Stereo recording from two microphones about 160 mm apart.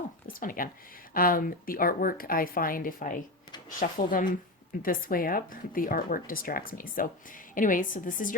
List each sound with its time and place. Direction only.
0.3 s speech: 60° left (ahead or behind)